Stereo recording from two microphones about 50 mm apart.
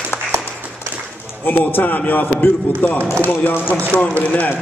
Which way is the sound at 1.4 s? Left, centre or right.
Left.